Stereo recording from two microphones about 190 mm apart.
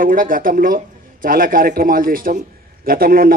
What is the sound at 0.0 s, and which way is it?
A man's voice, 45° right (ahead or behind).